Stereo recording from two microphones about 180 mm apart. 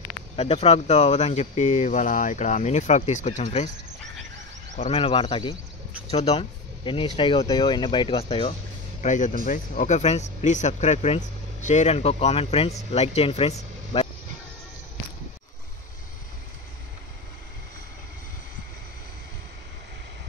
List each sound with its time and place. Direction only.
0.4 s speech: 35° left (ahead or behind)
4.7 s speech: 35° left (ahead or behind)
13.9 s vehicle: 30° left (ahead or behind)